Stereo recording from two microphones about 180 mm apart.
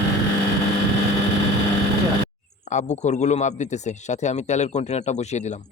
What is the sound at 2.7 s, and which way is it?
A man's voice, 40° left (ahead or behind).